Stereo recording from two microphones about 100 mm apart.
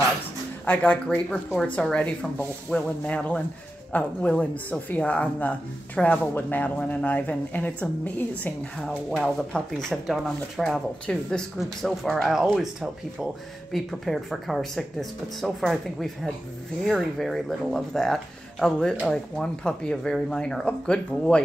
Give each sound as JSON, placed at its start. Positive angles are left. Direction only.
{"t": 1.1, "sound": "speech", "side_deg": 15}